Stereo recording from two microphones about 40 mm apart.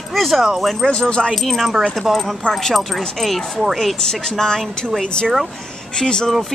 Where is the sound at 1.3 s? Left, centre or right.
Centre.